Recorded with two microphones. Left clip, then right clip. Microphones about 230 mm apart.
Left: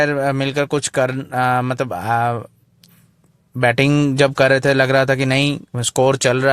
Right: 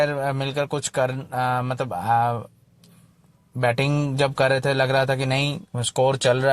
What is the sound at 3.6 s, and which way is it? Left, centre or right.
Speech, left.